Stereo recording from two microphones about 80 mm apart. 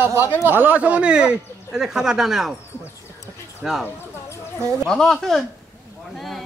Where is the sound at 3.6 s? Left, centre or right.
Centre.